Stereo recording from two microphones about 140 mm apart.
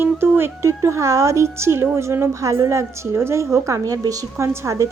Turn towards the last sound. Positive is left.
turn(degrees=-20)  # may be behind; listen again after turning